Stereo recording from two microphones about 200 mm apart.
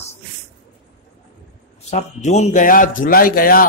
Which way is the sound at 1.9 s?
35° left (ahead or behind).